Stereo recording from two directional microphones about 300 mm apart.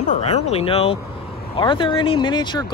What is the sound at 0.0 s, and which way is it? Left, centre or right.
Speech, left.